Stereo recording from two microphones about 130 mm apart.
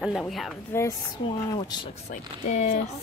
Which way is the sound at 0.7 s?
15° left (ahead or behind).